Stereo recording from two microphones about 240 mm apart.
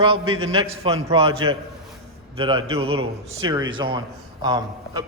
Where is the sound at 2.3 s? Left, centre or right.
Right.